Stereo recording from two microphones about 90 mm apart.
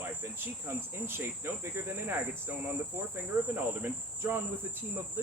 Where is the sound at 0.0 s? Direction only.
25° right (ahead or behind).